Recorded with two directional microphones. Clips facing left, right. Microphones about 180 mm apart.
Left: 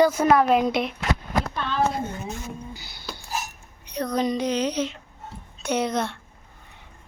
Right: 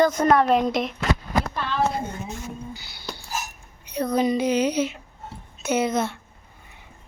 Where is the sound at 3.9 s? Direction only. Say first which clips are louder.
Right 3 dB; 5° right (ahead or behind).